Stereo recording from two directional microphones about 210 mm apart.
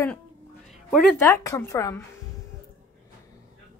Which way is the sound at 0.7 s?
Centre (ahead or behind).